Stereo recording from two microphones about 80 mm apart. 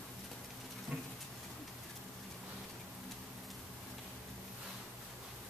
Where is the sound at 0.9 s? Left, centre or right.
Centre.